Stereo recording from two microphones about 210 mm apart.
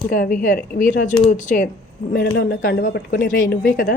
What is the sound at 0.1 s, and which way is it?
A woman's voice, 40° left (ahead or behind).